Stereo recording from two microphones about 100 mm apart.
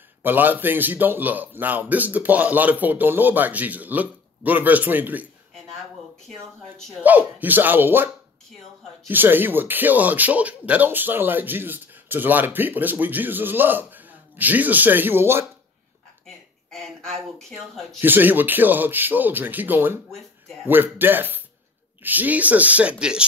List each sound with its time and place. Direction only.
0.2 s a man's voice: 20° right (ahead or behind)
7.0 s a man's voice: 15° right (ahead or behind)
16.7 s a woman's voice: 5° left (ahead or behind)
18.0 s a man's voice: 20° right (ahead or behind)